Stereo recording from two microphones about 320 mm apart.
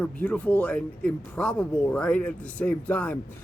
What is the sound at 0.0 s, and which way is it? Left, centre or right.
Speech, centre.